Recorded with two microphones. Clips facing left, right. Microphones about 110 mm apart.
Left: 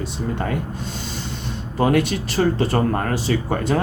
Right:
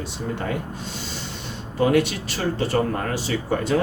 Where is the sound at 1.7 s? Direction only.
45° left (ahead or behind).